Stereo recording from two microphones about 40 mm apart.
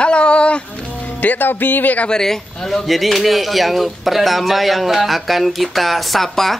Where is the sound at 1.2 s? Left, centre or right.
Left.